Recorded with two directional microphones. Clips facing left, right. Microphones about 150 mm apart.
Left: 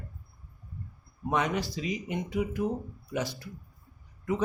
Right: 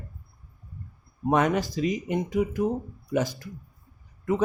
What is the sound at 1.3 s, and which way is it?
Speech, 45° right (ahead or behind).